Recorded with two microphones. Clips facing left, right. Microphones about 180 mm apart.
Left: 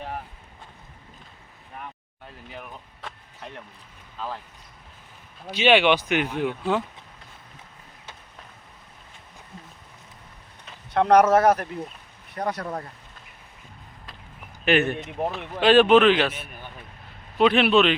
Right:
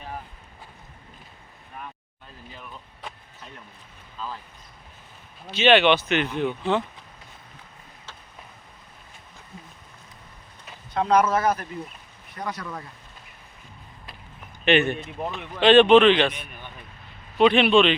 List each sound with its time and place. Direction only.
5.5 s speech: 10° left (ahead or behind)
10.9 s speech: 70° left (ahead or behind)
12.6 s speech: 40° left (ahead or behind)
14.6 s speech: 5° left (ahead or behind)